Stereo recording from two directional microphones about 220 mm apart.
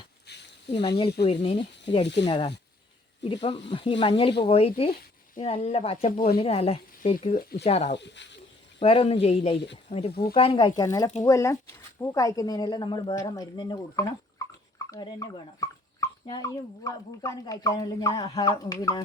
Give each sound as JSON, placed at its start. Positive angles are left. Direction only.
{"t": 0.7, "sound": "speech", "side_deg": 20}
{"t": 6.1, "sound": "speech", "side_deg": 40}
{"t": 6.4, "sound": "speech", "side_deg": 25}
{"t": 7.9, "sound": "speech", "side_deg": 55}
{"t": 8.8, "sound": "speech", "side_deg": 25}